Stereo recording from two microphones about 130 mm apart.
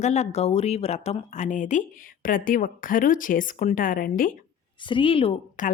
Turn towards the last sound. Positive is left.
turn(degrees=80)